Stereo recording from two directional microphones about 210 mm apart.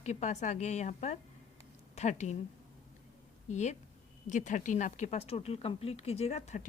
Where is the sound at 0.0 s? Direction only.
35° left (ahead or behind).